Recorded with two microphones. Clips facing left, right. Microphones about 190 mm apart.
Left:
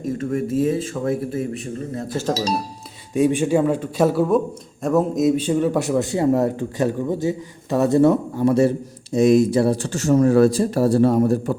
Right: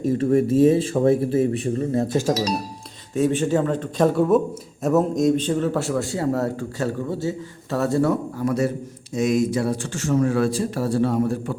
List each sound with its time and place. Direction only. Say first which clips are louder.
0.0 s speech: right 5 dB; 30° right (ahead or behind)
2.1 s speech: even; 15° right (ahead or behind)
3.2 s a man's voice: left 2 dB; 15° left (ahead or behind); by 11.5 s 40° left (ahead or behind)